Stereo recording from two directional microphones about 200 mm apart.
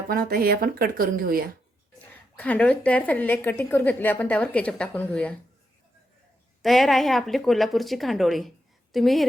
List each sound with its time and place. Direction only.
0.1 s speech: 50° right (ahead or behind)
2.3 s a woman's voice: 5° left (ahead or behind)
6.6 s speech: centre (ahead or behind)